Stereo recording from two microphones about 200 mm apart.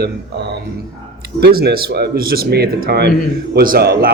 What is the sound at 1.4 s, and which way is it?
A man's voice, 50° right (ahead or behind).